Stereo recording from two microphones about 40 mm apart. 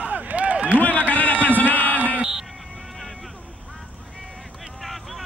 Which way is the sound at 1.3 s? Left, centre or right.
Right.